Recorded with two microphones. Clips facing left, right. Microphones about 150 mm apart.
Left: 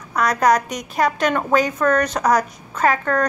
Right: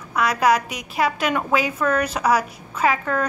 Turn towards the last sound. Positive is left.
turn(degrees=-5)  # may be behind; listen again after turning